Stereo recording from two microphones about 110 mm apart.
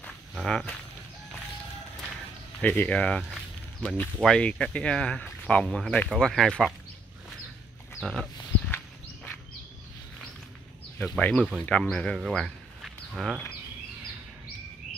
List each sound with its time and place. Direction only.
0.3 s speech: centre (ahead or behind)
2.6 s speech: 15° left (ahead or behind); by 6.7 s centre (ahead or behind)
8.0 s speech: centre (ahead or behind)
8.6 s walk: 20° left (ahead or behind)
11.1 s speech: 10° left (ahead or behind); by 13.4 s 5° right (ahead or behind)